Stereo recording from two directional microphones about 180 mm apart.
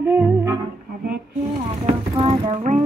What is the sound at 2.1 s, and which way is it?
Music, 30° right (ahead or behind).